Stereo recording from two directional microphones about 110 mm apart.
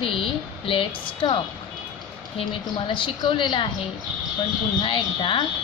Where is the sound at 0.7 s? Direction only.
50° left (ahead or behind).